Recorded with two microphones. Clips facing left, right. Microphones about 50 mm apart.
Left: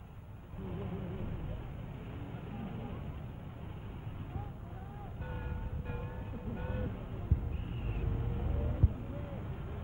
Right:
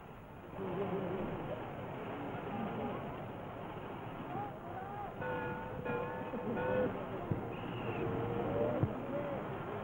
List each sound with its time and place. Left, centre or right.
0.7 s vehicle: right
2.5 s vehicle: right
5.2 s vehicle: right